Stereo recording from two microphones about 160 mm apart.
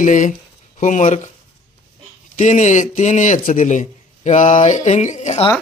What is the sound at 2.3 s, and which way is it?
A man's voice, 50° left (ahead or behind).